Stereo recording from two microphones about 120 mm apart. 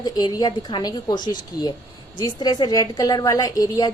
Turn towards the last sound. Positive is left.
turn(degrees=30)  # may be behind; listen again after turning